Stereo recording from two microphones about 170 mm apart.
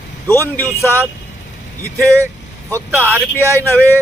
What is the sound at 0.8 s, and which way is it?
Speech, 15° right (ahead or behind).